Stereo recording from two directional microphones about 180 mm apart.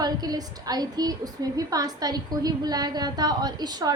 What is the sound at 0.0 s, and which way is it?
A woman's voice, 20° right (ahead or behind).